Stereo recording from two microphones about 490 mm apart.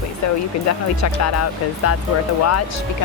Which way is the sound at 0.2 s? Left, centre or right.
Left.